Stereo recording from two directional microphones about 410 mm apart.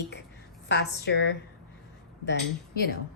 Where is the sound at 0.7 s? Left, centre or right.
Left.